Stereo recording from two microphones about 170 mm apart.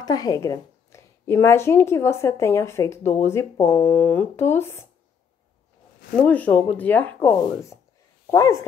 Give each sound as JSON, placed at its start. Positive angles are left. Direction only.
{"t": 0.0, "sound": "a woman's voice", "side_deg": 20}
{"t": 6.1, "sound": "a woman's voice", "side_deg": 10}